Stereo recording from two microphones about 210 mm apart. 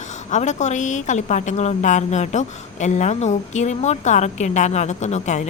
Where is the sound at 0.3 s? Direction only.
35° left (ahead or behind).